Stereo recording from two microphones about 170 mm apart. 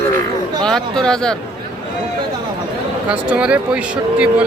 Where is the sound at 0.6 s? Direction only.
5° left (ahead or behind).